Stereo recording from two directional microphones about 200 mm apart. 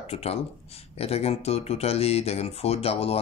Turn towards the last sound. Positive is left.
turn(degrees=30)  # may be behind; listen again after turning